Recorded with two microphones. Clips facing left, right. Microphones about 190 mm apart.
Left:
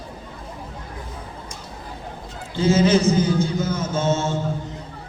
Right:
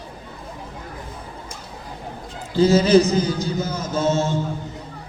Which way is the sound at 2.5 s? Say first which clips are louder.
Right 3 dB; 35° right (ahead or behind).